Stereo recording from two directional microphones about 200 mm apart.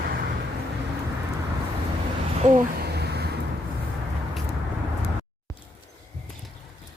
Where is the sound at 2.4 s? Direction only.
40° right (ahead or behind).